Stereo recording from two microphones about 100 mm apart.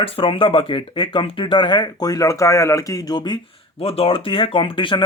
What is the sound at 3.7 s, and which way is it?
Speech, 80° left.